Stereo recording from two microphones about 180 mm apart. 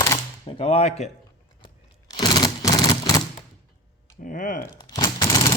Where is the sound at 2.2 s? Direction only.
20° left (ahead or behind).